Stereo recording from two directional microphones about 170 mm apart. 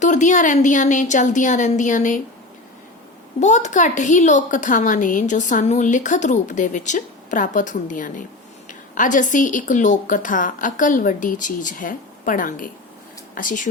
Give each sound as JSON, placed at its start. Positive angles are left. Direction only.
{"t": 0.0, "sound": "a woman's voice", "side_deg": 45}
{"t": 3.4, "sound": "a woman's voice", "side_deg": 45}